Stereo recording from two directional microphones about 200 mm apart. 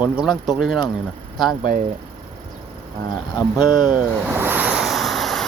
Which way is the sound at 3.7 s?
20° left (ahead or behind).